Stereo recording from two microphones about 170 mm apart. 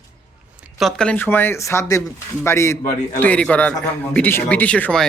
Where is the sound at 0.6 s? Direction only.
Centre (ahead or behind).